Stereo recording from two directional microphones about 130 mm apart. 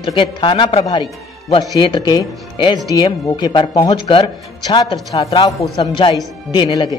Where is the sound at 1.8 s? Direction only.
35° left (ahead or behind).